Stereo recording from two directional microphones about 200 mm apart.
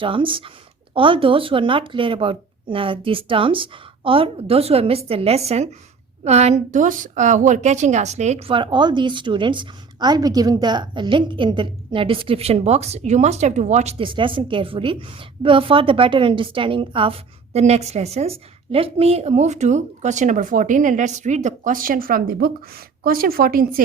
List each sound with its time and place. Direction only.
0.0 s a woman's voice: 25° right (ahead or behind); by 23.8 s 45° right (ahead or behind)